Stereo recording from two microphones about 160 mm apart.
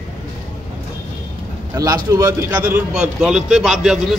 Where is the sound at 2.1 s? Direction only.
20° right (ahead or behind); by 4.2 s centre (ahead or behind).